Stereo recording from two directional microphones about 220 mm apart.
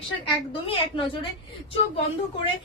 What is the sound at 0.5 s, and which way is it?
Speech, 25° left (ahead or behind).